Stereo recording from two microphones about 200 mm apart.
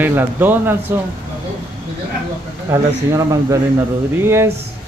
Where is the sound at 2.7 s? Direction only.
15° right (ahead or behind).